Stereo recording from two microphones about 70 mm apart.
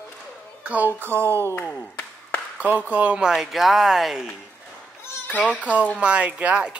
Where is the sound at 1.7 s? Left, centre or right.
Left.